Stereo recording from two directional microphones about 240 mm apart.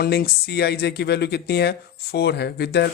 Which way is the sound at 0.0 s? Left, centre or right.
Left.